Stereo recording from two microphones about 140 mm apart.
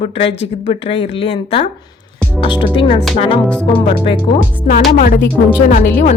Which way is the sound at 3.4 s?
10° left (ahead or behind).